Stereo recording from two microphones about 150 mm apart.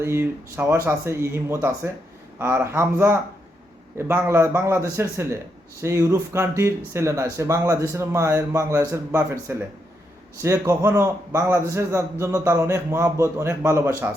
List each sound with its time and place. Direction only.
0.0 s a man's voice: 15° right (ahead or behind)